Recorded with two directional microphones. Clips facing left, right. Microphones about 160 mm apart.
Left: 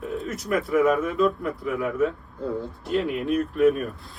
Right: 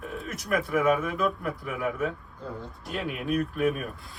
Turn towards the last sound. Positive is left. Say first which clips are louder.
# left 7 dB
turn(degrees=0)  # may be behind; listen again after turning